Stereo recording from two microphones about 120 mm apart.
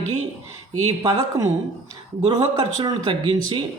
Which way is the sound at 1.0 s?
30° right (ahead or behind).